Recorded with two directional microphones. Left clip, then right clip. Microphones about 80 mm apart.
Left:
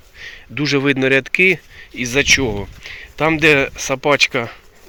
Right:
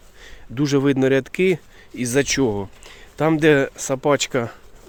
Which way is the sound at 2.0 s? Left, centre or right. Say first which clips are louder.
Left 5 dB; right.